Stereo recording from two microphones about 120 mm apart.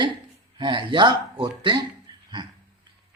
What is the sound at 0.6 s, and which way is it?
Speech, 40° right (ahead or behind).